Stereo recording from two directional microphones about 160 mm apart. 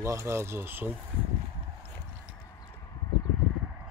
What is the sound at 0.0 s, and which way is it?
Speech, 20° right (ahead or behind).